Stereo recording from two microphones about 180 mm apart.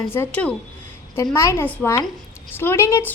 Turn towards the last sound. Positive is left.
turn(degrees=15)  # may be behind; listen again after turning